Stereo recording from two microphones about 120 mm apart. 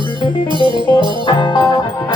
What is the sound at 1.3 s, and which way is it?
Music, 35° left (ahead or behind).